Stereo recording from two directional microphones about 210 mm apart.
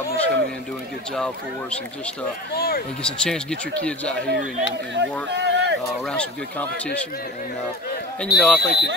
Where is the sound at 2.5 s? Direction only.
45° left (ahead or behind).